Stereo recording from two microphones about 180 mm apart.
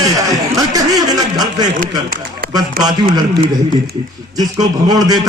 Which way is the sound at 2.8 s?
20° right (ahead or behind).